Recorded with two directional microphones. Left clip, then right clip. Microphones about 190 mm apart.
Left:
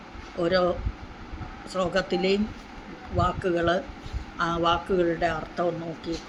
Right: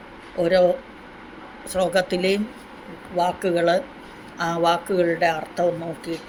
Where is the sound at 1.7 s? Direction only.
5° right (ahead or behind).